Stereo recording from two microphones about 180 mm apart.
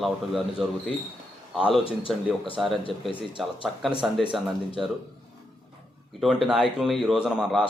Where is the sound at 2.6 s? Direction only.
5° right (ahead or behind).